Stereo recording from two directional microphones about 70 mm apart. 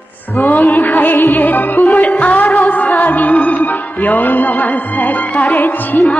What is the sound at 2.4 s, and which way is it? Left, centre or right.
Music, centre.